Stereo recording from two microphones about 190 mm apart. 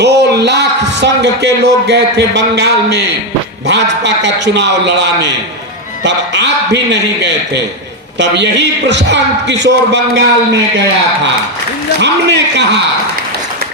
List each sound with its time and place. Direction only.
0.0 s a man's voice: 60° right (ahead or behind)
11.9 s a man's voice: 65° right (ahead or behind)